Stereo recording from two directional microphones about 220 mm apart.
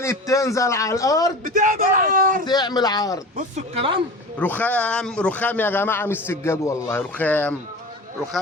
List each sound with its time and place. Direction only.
0.0 s a man's voice: 15° left (ahead or behind)
1.5 s a man's voice: 35° right (ahead or behind)
2.4 s a man's voice: 20° left (ahead or behind)
3.3 s speech: 25° right (ahead or behind)
4.4 s a man's voice: 5° left (ahead or behind)